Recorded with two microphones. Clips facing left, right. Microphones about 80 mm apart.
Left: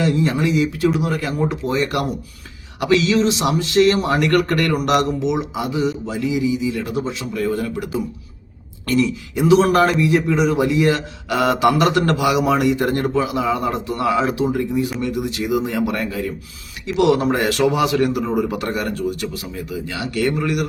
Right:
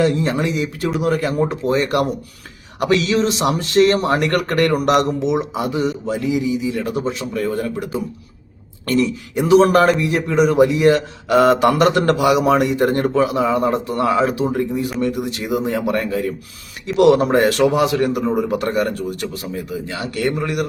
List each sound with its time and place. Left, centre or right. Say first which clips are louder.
0.0 s a man's voice: right 1 dB; right
8.9 s a man's voice: right 1 dB; right